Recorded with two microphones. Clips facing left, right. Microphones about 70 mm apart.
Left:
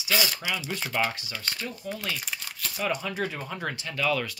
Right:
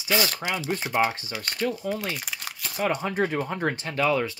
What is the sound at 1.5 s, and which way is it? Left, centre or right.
Speech, right.